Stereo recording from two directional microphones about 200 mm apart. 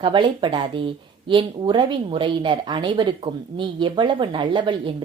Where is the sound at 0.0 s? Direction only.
25° right (ahead or behind).